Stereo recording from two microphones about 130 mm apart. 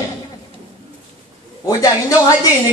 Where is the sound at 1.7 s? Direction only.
25° left (ahead or behind).